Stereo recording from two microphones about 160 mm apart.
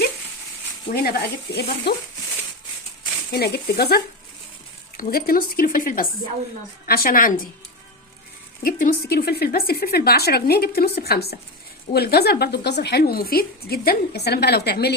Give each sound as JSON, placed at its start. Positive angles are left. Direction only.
{"t": 0.9, "sound": "speech", "side_deg": 70}
{"t": 3.3, "sound": "a woman's voice", "side_deg": 80}
{"t": 4.9, "sound": "speech", "side_deg": 65}
{"t": 8.6, "sound": "a woman's voice", "side_deg": 70}